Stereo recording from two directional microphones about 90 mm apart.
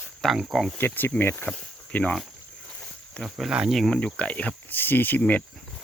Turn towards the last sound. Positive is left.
turn(degrees=15)  # may be behind; listen again after turning